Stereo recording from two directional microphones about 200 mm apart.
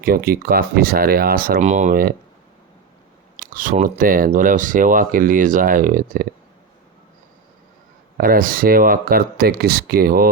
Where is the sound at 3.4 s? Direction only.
45° right (ahead or behind).